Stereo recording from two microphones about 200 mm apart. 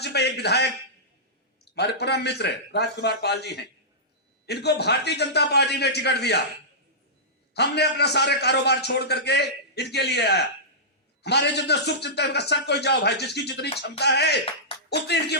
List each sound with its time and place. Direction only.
0.0 s a man's voice: 55° left (ahead or behind)
1.7 s a man's voice: 55° left (ahead or behind)
7.5 s a man's voice: 55° left (ahead or behind)